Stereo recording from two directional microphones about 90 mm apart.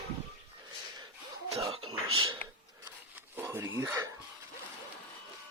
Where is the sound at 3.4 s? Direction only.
30° right (ahead or behind).